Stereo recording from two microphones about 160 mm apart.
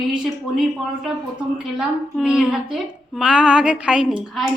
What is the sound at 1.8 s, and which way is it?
A woman's voice, 5° right (ahead or behind).